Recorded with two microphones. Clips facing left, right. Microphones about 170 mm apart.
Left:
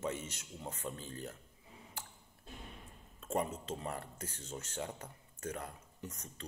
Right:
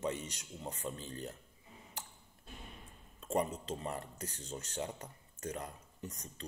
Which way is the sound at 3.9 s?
10° right (ahead or behind).